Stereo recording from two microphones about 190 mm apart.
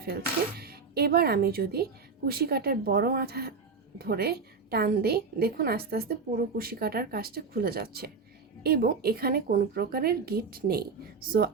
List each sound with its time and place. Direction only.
0.0 s a woman's voice: 55° right (ahead or behind)